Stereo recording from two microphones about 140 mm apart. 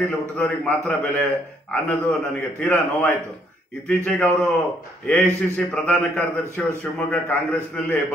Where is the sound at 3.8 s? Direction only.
10° left (ahead or behind).